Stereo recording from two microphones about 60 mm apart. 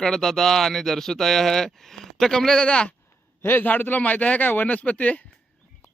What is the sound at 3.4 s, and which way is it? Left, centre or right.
Speech, left.